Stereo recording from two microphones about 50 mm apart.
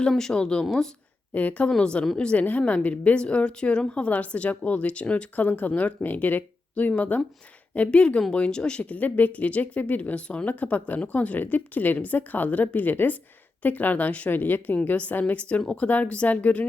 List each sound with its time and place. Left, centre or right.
0.1 s speech: centre
1.3 s speech: left
1.8 s a woman's voice: centre
7.9 s a woman's voice: left
8.8 s speech: left
14.3 s a woman's voice: left